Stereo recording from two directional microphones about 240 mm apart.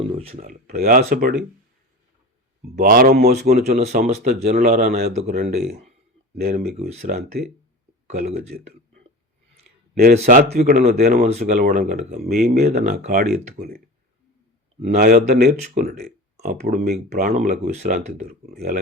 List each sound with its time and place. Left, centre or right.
0.0 s speech: right
2.6 s speech: right
3.8 s speech: right
6.3 s speech: right
9.9 s speech: right
18.5 s speech: right